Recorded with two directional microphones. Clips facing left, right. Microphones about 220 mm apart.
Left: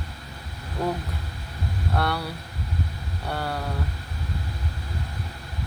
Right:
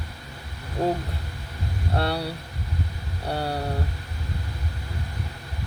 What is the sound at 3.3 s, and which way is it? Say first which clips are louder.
Vehicle: right 2 dB; 30° right (ahead or behind).